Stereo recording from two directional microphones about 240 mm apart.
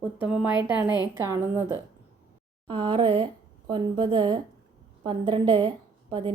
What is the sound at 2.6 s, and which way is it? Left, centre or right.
A woman's voice, right.